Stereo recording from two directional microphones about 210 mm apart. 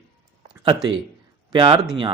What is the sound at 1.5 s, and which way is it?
Speech, 25° right (ahead or behind).